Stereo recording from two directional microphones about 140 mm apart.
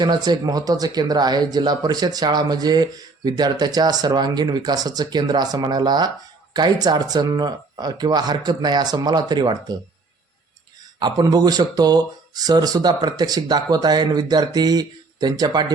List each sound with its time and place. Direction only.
0.0 s speech: 30° right (ahead or behind)
11.0 s speech: 30° right (ahead or behind)